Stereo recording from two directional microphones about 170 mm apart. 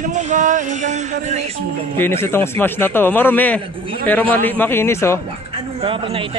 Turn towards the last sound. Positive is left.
turn(degrees=-30)  # may be behind; listen again after turning